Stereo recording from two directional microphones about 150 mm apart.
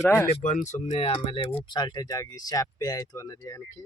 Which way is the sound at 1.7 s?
30° left (ahead or behind).